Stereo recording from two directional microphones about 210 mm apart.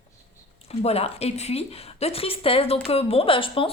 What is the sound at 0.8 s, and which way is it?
A woman's voice, 30° left (ahead or behind).